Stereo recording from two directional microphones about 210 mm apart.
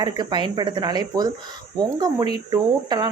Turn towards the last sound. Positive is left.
turn(degrees=-20)  # may be behind; listen again after turning